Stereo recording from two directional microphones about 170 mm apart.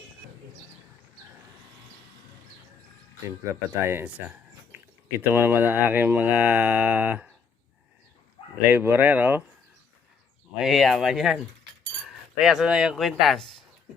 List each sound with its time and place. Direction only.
3.5 s speech: 15° right (ahead or behind)
5.2 s speech: 10° right (ahead or behind)
8.7 s speech: 10° right (ahead or behind)
10.6 s speech: centre (ahead or behind)
12.4 s speech: centre (ahead or behind)